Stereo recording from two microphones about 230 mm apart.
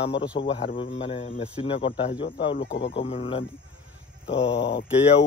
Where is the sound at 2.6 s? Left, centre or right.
Left.